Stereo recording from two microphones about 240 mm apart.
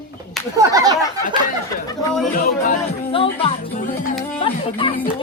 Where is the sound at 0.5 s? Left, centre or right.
Centre.